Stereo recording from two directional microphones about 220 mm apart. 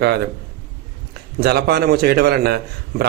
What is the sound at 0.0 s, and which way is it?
Speech, 45° right (ahead or behind).